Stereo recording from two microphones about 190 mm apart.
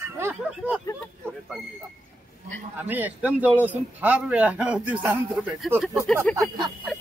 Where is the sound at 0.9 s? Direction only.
15° left (ahead or behind).